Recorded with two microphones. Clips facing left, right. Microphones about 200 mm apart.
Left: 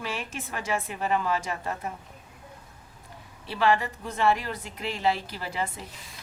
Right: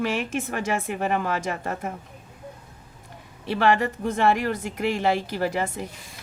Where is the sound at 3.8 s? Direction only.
50° right (ahead or behind).